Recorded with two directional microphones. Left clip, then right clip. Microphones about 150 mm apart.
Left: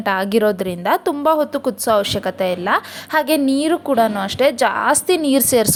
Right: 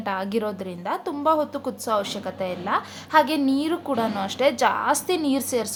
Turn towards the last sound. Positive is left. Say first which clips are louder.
# left 9 dB
turn(degrees=45)  # may be behind; listen again after turning